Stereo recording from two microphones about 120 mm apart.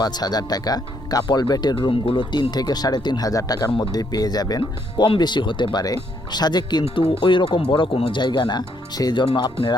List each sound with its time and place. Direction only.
0.0 s speech: 35° left (ahead or behind)
1.7 s speech: 50° left (ahead or behind)
6.8 s speech: 55° left (ahead or behind)